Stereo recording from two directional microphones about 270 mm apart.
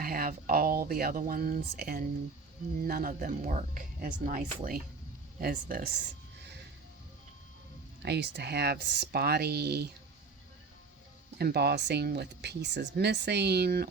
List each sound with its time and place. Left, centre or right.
0.0 s speech: right
8.0 s speech: right
11.3 s speech: right